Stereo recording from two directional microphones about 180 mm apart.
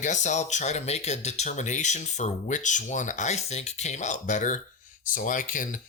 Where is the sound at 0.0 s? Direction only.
40° left (ahead or behind).